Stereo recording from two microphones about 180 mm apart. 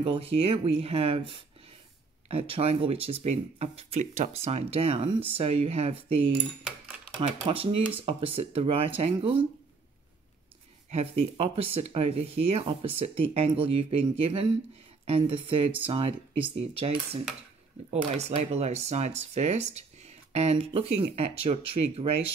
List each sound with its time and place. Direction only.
0.0 s speech: 30° right (ahead or behind)
10.9 s speech: 35° right (ahead or behind)